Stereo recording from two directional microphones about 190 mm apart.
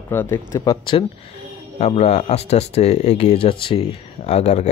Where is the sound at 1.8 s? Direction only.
35° left (ahead or behind).